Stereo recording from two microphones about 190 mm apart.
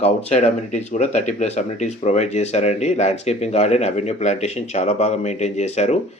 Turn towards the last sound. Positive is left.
turn(degrees=35)  # may be behind; listen again after turning